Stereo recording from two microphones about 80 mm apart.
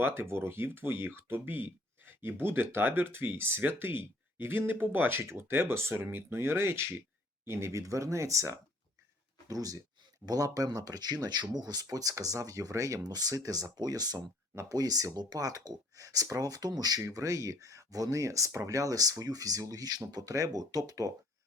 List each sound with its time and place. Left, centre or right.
0.0 s speech: right
17.0 s speech: right